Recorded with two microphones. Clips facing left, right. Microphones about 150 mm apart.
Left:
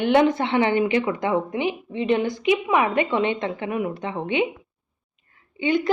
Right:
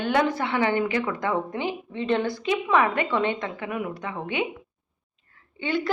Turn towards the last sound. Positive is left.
turn(degrees=20)  # may be behind; listen again after turning